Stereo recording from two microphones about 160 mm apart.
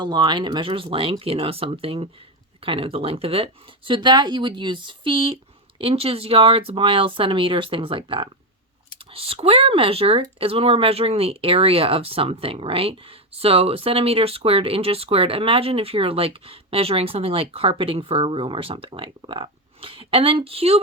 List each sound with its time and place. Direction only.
0.0 s speech: 30° right (ahead or behind)